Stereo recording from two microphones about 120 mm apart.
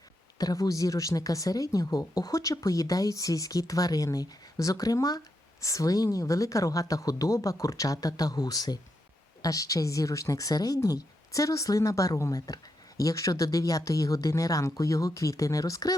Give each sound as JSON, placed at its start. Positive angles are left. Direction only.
{"t": 0.3, "sound": "speech", "side_deg": 30}